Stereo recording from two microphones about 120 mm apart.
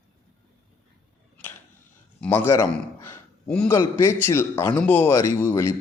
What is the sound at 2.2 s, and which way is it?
Speech, 20° left (ahead or behind).